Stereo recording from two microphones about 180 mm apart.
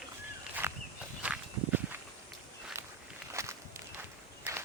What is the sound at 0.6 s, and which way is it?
Walk, 15° right (ahead or behind).